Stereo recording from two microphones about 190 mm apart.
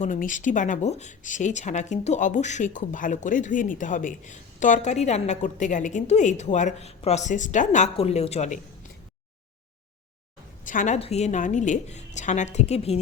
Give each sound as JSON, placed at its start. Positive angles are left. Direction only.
{"t": 0.0, "sound": "speech", "side_deg": 40}
{"t": 10.7, "sound": "speech", "side_deg": 40}